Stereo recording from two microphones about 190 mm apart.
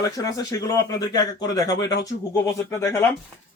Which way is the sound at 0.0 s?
15° left (ahead or behind).